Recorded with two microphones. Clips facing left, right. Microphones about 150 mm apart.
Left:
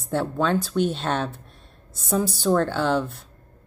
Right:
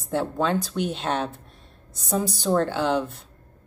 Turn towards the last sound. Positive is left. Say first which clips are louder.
# left 1 dB
turn(degrees=-15)  # may be behind; listen again after turning